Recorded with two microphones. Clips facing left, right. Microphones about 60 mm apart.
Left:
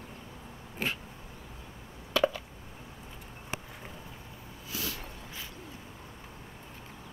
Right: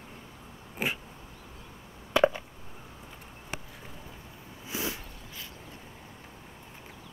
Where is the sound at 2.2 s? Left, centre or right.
Right.